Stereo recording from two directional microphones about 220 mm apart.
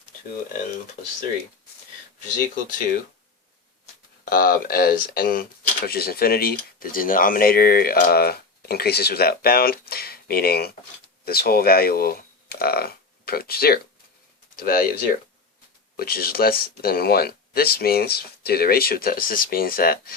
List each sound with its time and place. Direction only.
2.6 s speech: 35° left (ahead or behind)
4.3 s speech: 40° left (ahead or behind)
16.0 s speech: 40° left (ahead or behind)